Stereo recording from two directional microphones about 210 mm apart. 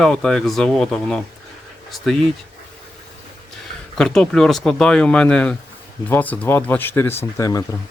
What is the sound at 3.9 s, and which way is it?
Speech, 5° left (ahead or behind).